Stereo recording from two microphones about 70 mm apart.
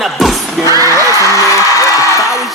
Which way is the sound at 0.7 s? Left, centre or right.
Right.